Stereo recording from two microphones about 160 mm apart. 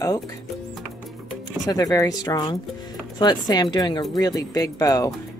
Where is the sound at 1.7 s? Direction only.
20° left (ahead or behind).